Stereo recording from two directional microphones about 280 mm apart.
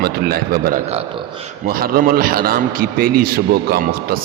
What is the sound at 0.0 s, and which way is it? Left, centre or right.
A man's voice, right.